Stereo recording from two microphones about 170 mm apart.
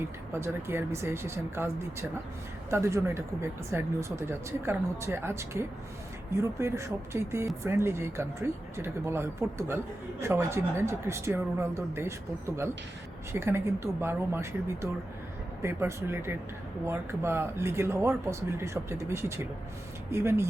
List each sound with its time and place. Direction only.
0.0 s speech: 15° right (ahead or behind)